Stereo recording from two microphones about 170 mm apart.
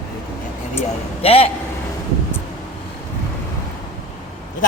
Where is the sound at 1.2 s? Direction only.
35° left (ahead or behind).